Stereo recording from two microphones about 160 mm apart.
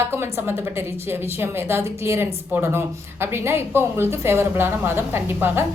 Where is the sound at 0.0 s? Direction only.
15° right (ahead or behind).